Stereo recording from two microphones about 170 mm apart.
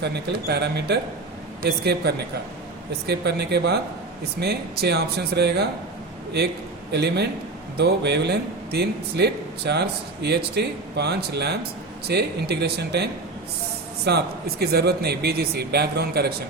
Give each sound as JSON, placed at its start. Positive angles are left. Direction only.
{"t": 0.0, "sound": "speech", "side_deg": -80}
{"t": 6.9, "sound": "speech", "side_deg": -75}